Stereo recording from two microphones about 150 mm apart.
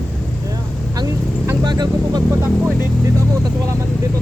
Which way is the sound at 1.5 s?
25° right (ahead or behind).